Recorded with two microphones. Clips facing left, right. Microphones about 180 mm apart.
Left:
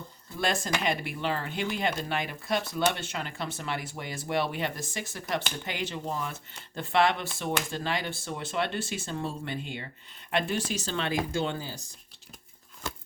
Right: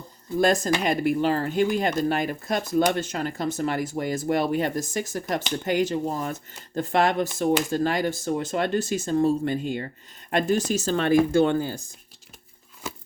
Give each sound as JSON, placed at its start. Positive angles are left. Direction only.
{"t": 0.3, "sound": "speech", "side_deg": -40}